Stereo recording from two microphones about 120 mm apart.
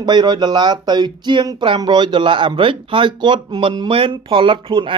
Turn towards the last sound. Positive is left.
turn(degrees=-45)  # may be behind; listen again after turning